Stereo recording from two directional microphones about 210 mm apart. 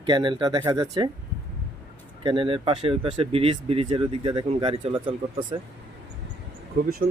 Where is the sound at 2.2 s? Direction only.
25° right (ahead or behind).